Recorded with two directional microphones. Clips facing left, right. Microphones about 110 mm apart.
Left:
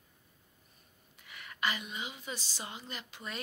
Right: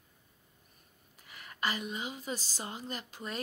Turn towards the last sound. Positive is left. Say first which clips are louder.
# right 3 dB
turn(degrees=-40)  # may be behind; listen again after turning